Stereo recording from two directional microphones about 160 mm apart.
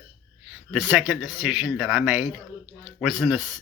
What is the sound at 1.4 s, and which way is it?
Speech, centre (ahead or behind).